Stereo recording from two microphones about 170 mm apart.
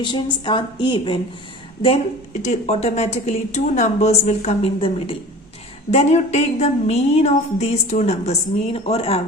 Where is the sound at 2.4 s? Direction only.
40° left (ahead or behind).